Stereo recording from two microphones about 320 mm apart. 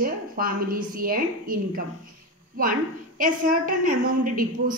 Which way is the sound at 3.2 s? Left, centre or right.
Right.